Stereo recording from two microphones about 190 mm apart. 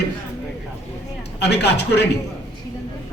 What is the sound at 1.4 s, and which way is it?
Speech, 60° left (ahead or behind).